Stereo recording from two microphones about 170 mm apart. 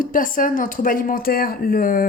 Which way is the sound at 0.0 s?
50° left (ahead or behind).